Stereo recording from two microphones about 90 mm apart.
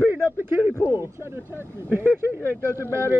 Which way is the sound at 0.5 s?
20° right (ahead or behind).